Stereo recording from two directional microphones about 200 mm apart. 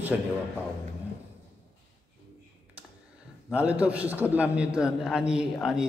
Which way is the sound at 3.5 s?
5° right (ahead or behind).